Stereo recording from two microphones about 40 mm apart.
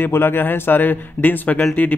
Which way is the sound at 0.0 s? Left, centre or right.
Left.